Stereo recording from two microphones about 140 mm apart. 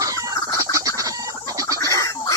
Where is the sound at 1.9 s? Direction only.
25° left (ahead or behind).